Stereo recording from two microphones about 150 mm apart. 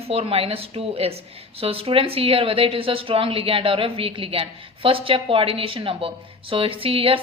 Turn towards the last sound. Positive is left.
turn(degrees=-40)  # may be behind; listen again after turning